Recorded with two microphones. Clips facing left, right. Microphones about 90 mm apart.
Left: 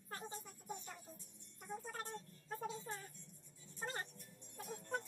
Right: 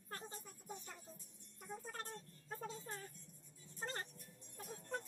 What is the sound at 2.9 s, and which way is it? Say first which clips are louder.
Speech: left 1 dB; centre (ahead or behind).